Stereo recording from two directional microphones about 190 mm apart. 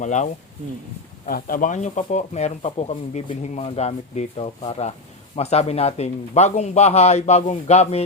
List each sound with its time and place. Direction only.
0.0 s speech: 40° left (ahead or behind)
1.3 s speech: 50° left (ahead or behind)